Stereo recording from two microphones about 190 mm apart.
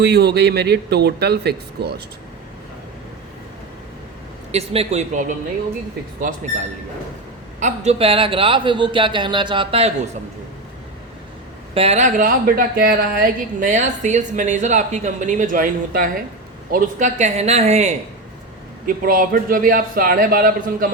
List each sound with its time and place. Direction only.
0.0 s speech: 60° right (ahead or behind)
4.5 s a woman's voice: 35° right (ahead or behind)
11.7 s a woman's voice: 30° right (ahead or behind)
18.9 s a man's voice: 45° right (ahead or behind)